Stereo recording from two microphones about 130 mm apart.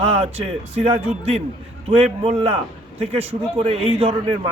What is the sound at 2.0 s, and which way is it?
Speech, 50° right (ahead or behind).